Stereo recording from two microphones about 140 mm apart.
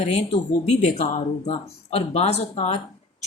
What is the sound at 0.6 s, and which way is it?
Speech, 50° left (ahead or behind).